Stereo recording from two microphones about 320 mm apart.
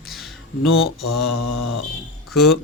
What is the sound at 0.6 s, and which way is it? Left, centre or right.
Mantra, left.